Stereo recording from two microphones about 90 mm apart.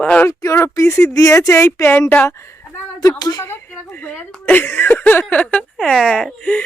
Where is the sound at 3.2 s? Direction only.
50° left (ahead or behind).